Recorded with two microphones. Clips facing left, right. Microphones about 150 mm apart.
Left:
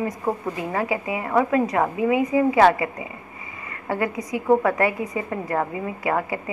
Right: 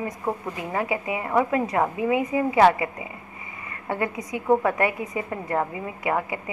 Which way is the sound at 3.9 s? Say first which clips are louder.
Left 3 dB; 25° right (ahead or behind).